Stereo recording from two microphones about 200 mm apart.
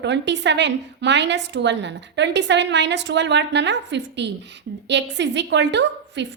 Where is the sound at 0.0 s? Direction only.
60° right (ahead or behind).